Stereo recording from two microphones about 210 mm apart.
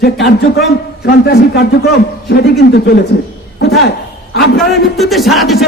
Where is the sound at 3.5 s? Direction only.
50° left (ahead or behind).